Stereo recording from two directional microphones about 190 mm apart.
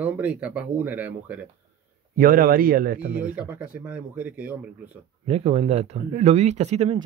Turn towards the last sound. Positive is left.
turn(degrees=-35)  # may be behind; listen again after turning